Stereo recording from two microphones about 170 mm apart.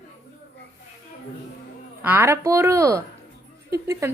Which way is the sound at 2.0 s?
10° right (ahead or behind).